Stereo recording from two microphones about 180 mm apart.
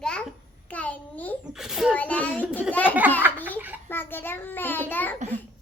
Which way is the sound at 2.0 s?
10° left (ahead or behind).